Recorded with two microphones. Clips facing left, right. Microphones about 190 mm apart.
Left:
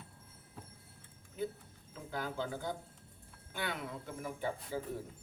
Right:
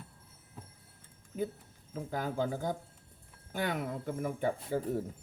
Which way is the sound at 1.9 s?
45° right (ahead or behind).